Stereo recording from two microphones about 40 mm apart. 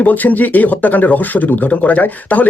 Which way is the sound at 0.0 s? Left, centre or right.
Left.